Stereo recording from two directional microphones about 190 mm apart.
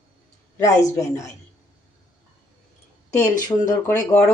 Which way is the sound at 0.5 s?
15° left (ahead or behind).